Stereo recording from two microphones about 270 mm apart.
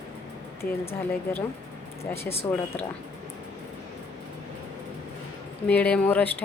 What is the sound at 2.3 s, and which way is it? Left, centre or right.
Speech, left.